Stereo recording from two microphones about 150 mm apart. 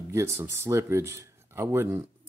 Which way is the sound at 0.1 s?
20° right (ahead or behind).